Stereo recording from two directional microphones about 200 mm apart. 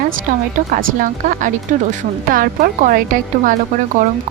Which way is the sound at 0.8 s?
40° right (ahead or behind).